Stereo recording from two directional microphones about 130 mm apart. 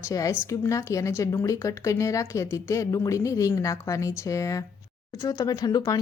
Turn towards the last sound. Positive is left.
turn(degrees=30)  # may be behind; listen again after turning